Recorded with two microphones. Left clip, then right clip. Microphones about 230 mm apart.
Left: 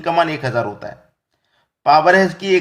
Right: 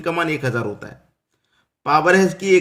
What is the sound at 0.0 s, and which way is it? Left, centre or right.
Speech, centre.